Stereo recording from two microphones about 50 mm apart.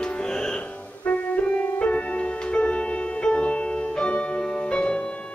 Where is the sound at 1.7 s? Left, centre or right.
Left.